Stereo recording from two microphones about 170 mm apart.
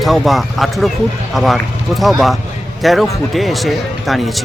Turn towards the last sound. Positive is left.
turn(degrees=0)  # may be behind; listen again after turning